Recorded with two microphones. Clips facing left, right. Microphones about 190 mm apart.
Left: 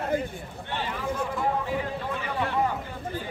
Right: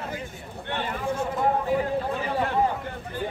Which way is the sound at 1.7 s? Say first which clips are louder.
Right 5 dB; 40° right (ahead or behind).